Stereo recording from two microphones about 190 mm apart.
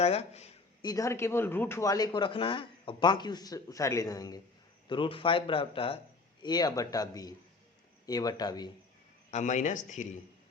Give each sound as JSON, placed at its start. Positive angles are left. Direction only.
{"t": 0.0, "sound": "speech", "side_deg": 35}
{"t": 0.8, "sound": "speech", "side_deg": 20}
{"t": 9.3, "sound": "speech", "side_deg": 40}